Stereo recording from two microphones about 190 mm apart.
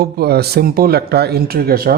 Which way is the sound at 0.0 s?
55° right (ahead or behind).